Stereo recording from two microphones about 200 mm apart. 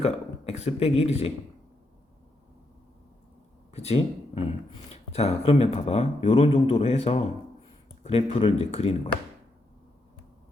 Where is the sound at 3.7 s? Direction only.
30° left (ahead or behind).